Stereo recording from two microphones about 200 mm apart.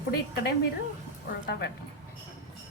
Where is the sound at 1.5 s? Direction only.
55° left (ahead or behind).